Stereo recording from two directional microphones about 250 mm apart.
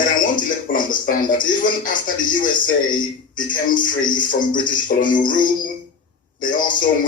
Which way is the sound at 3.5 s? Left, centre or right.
Left.